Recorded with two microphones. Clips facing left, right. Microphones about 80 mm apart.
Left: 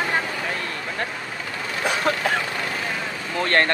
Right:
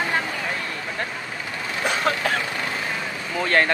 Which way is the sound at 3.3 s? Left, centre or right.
Centre.